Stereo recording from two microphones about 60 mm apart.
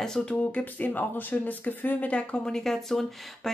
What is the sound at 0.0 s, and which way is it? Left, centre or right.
Speech, centre.